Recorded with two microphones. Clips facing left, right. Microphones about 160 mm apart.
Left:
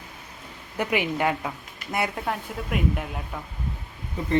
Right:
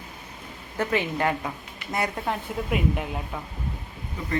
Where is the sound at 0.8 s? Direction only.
15° left (ahead or behind); by 3.4 s centre (ahead or behind).